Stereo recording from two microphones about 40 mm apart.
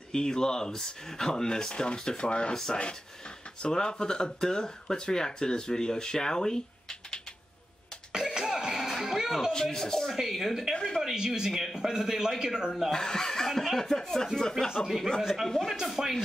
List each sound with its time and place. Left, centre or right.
0.1 s speech: centre
2.5 s speech: centre
8.1 s cough: centre
9.0 s a sound: centre
9.5 s speech: centre
10.1 s speech: centre
10.7 s speech: centre
11.0 s a man's voice: centre
12.9 s speech: centre
14.7 s speech: centre
15.4 s speech: centre
16.0 s a man's voice: centre